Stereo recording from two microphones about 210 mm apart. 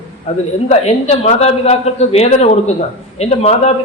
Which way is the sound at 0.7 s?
30° left (ahead or behind).